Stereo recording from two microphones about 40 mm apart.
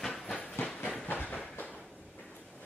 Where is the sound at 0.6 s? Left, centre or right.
Left.